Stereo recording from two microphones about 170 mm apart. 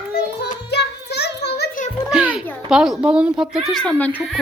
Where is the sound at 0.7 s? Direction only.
80° left.